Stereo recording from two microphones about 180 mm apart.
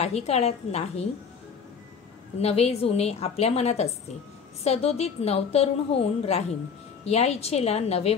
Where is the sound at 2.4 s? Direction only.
35° left (ahead or behind).